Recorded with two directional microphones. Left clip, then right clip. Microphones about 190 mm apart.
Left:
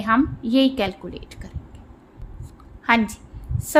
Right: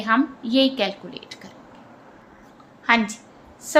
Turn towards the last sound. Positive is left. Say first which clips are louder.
# even
turn(degrees=30)  # may be behind; listen again after turning